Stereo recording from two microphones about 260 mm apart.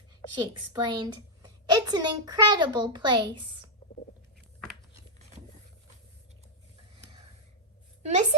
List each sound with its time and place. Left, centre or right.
0.3 s a woman's voice: centre
8.0 s a woman's voice: right